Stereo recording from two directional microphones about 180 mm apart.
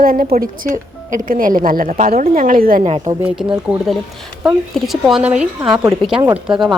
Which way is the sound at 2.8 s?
35° right (ahead or behind).